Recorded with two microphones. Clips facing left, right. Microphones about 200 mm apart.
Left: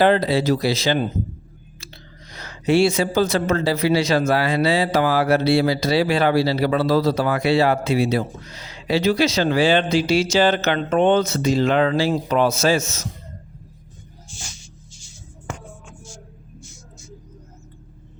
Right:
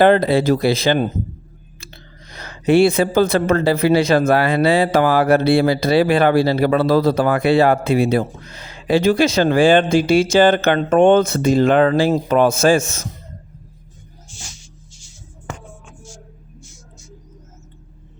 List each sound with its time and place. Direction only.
0.0 s speech: 55° right (ahead or behind)
2.3 s speech: 55° right (ahead or behind)